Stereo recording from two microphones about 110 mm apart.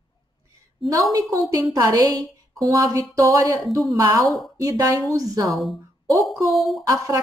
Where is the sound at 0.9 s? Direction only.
30° right (ahead or behind).